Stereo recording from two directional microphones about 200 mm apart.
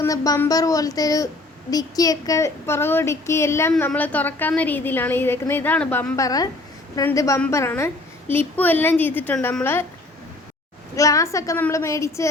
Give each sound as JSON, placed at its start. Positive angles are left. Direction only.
{"t": 0.0, "sound": "speech", "side_deg": 15}
{"t": 10.9, "sound": "speech", "side_deg": 15}